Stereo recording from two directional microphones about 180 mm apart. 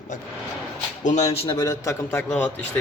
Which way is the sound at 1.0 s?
40° left (ahead or behind).